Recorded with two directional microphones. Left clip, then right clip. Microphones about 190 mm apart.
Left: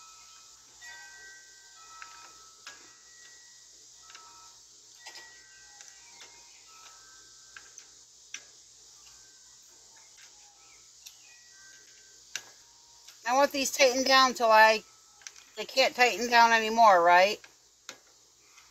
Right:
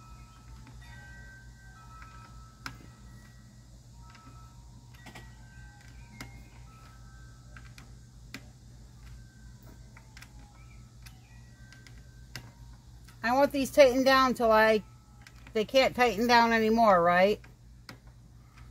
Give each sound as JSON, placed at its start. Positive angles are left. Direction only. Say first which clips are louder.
{"t": 13.3, "sound": "speech", "louder": "left 1 dB", "side_deg": -35}